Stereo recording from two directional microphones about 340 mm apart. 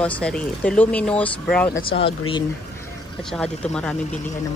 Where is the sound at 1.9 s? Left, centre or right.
Centre.